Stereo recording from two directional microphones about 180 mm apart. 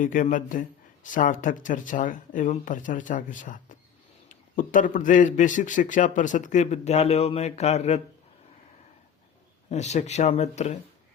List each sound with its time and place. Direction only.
0.0 s a man's voice: 45° left (ahead or behind)
9.6 s speech: 40° left (ahead or behind)